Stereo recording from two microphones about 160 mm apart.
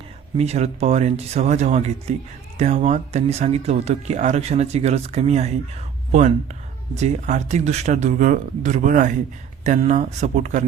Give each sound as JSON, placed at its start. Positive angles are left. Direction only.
{"t": 0.3, "sound": "speech", "side_deg": -40}